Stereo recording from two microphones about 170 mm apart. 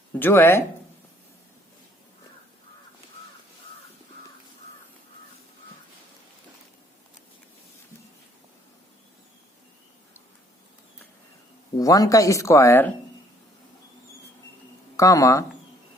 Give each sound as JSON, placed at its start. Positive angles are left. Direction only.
{"t": 0.2, "sound": "speech", "side_deg": 15}
{"t": 11.8, "sound": "speech", "side_deg": 20}
{"t": 14.9, "sound": "speech", "side_deg": 20}